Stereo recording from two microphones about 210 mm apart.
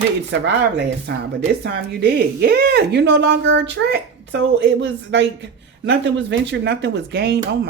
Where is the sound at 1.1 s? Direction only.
60° right (ahead or behind).